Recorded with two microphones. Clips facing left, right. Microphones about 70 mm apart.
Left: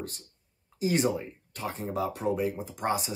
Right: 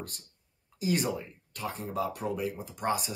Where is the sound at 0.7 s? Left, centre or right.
Left.